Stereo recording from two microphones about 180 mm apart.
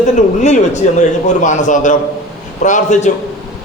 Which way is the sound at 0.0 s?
40° left (ahead or behind).